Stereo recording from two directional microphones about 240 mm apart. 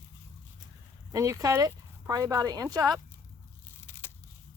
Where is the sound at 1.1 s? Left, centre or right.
Centre.